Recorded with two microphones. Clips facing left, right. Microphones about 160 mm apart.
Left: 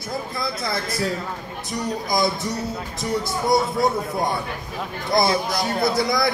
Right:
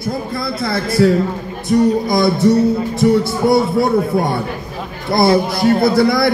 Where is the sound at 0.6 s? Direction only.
65° right (ahead or behind).